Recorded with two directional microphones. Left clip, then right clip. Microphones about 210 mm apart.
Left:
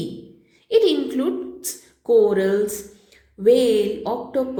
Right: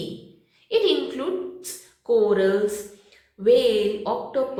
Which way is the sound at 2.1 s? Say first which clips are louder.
Left 3 dB; 40° left (ahead or behind).